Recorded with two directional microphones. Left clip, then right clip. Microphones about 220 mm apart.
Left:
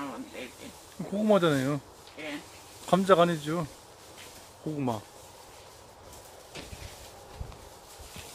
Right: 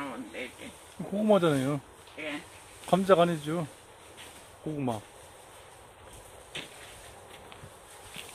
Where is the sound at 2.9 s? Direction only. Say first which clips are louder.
Left 1 dB; centre (ahead or behind).